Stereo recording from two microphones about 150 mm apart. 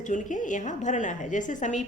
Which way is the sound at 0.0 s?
55° left (ahead or behind).